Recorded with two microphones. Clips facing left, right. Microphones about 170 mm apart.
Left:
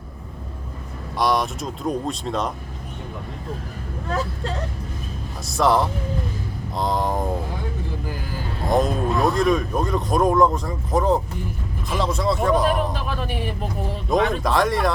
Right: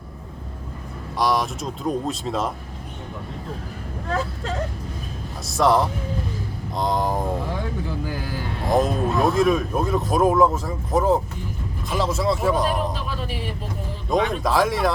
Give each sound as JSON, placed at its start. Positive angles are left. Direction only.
{"t": 1.1, "sound": "speech", "side_deg": 0}
{"t": 5.5, "sound": "speech", "side_deg": 0}
{"t": 8.7, "sound": "speech", "side_deg": 0}
{"t": 12.9, "sound": "a sound", "side_deg": 55}
{"t": 14.1, "sound": "speech", "side_deg": 0}